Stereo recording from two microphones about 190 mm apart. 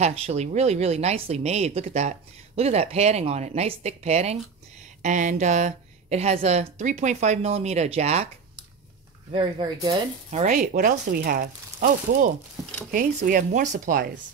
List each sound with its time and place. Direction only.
0.0 s speech: 35° right (ahead or behind)
9.3 s speech: 25° right (ahead or behind)
10.4 s speech: 40° right (ahead or behind)